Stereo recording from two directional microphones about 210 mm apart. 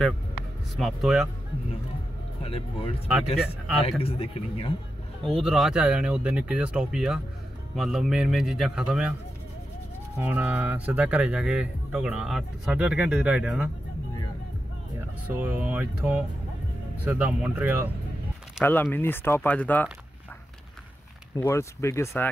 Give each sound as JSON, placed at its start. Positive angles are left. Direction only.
{"t": 0.7, "sound": "speech", "side_deg": 0}
{"t": 2.4, "sound": "speech", "side_deg": 25}
{"t": 3.3, "sound": "speech", "side_deg": 0}
{"t": 4.0, "sound": "speech", "side_deg": 30}
{"t": 5.2, "sound": "speech", "side_deg": 0}
{"t": 10.1, "sound": "speech", "side_deg": -5}
{"t": 15.0, "sound": "speech", "side_deg": -10}
{"t": 18.6, "sound": "speech", "side_deg": 10}
{"t": 21.4, "sound": "speech", "side_deg": 10}